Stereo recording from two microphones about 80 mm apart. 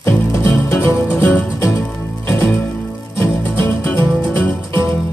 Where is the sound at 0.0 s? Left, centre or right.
Left.